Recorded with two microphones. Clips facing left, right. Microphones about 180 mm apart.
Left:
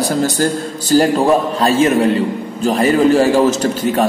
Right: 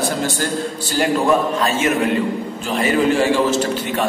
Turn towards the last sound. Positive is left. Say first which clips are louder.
# left 5 dB
turn(degrees=40)  # may be behind; listen again after turning